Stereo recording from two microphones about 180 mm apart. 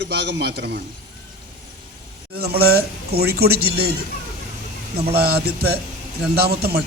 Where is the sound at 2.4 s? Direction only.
60° right (ahead or behind).